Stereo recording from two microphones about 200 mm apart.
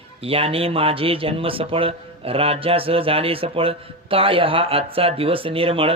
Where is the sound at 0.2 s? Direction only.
30° right (ahead or behind).